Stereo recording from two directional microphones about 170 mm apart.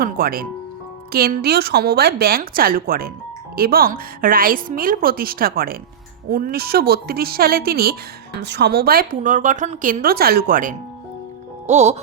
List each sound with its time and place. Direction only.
0.0 s a woman's voice: 60° right (ahead or behind)
8.4 s a woman's voice: 90° right; by 10.8 s 55° right (ahead or behind)
11.6 s music: 40° right (ahead or behind)